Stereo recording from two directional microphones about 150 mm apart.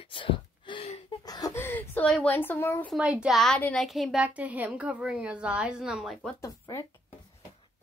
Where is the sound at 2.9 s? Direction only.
10° right (ahead or behind).